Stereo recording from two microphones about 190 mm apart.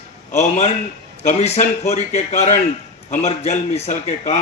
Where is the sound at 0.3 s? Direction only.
35° left (ahead or behind).